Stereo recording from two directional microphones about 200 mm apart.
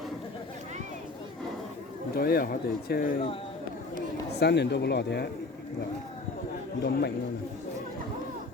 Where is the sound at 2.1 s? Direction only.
50° left (ahead or behind).